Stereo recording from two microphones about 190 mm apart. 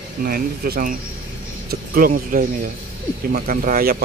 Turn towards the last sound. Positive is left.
turn(degrees=-50)  # may be behind; listen again after turning